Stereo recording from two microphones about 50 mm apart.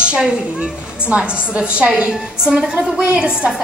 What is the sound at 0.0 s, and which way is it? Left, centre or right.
A woman's voice, centre.